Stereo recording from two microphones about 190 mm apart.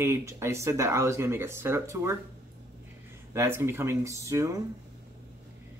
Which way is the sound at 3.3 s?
15° right (ahead or behind).